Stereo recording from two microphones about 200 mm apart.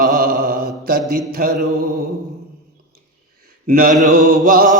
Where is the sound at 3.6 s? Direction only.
45° right (ahead or behind).